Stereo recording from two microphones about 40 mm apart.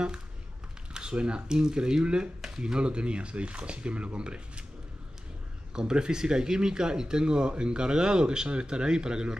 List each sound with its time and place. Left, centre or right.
0.9 s speech: right
5.8 s speech: centre